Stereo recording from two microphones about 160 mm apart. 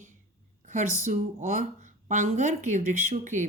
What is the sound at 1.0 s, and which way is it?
Speech, 50° right (ahead or behind).